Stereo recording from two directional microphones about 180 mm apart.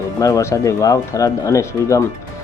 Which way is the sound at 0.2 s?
20° left (ahead or behind).